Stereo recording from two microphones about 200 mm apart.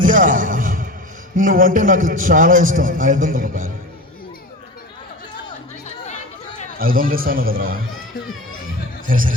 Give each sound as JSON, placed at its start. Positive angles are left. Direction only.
{"t": 0.0, "sound": "a sound", "side_deg": -40}
{"t": 1.5, "sound": "a man's voice", "side_deg": -45}
{"t": 6.7, "sound": "a man's voice", "side_deg": -45}
{"t": 9.0, "sound": "speech", "side_deg": -45}